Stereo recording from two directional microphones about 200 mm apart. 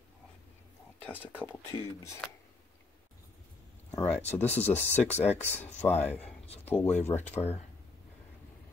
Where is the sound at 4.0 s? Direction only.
10° left (ahead or behind).